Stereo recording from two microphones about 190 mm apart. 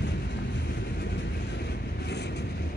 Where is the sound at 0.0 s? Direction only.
65° left (ahead or behind).